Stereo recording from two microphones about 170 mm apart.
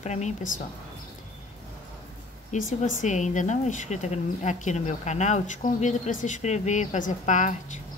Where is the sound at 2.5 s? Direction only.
50° left (ahead or behind).